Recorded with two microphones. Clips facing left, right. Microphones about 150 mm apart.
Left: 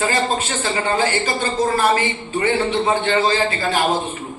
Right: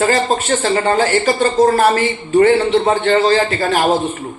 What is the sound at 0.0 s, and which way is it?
Speech, 55° right (ahead or behind).